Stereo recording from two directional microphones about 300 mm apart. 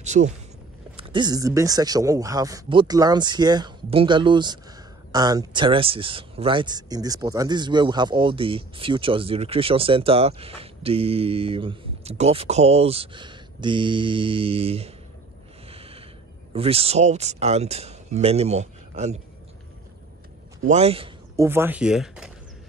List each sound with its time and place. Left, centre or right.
0.0 s a sound: right
0.9 s speech: centre
15.7 s a sound: centre
16.5 s speech: centre
20.6 s a man's voice: right
21.5 s speech: centre